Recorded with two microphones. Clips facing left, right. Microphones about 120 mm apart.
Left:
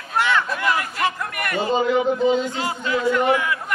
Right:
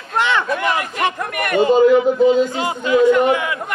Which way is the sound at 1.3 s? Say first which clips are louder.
Right 8 dB; 60° right (ahead or behind).